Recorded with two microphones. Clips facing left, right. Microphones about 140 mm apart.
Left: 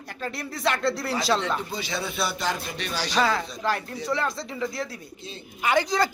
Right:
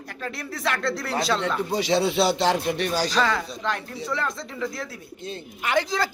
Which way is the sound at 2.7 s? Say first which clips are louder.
Right 6 dB; 45° right (ahead or behind).